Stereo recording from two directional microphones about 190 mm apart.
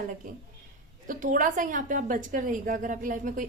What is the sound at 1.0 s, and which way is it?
A woman's voice, 45° right (ahead or behind).